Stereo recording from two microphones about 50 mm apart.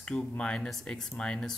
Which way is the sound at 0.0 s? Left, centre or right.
Centre.